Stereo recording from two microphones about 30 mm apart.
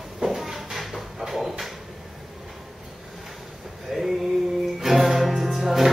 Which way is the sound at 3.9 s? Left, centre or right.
Centre.